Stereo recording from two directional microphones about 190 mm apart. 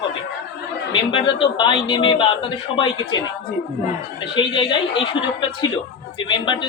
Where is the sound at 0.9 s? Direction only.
25° left (ahead or behind).